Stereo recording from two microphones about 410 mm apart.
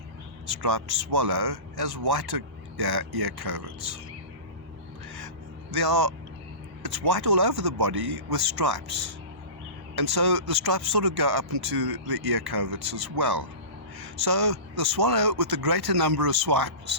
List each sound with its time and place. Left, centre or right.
0.4 s speech: right
5.7 s speech: right